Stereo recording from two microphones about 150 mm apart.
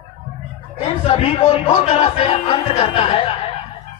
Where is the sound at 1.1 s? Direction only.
40° left (ahead or behind).